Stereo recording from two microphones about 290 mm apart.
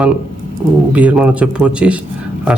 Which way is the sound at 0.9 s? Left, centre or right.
Centre.